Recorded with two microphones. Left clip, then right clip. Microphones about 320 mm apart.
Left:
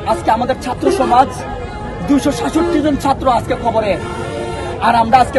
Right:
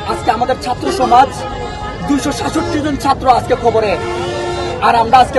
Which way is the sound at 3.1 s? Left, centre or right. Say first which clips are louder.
Right 6 dB; centre.